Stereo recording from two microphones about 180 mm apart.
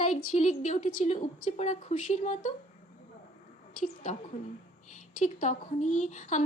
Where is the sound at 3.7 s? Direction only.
45° left (ahead or behind).